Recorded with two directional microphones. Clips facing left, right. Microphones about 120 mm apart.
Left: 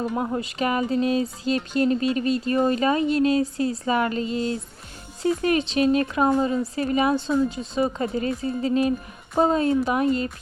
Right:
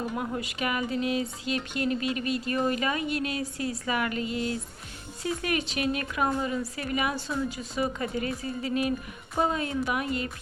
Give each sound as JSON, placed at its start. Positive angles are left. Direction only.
{"t": 0.2, "sound": "speech", "side_deg": 30}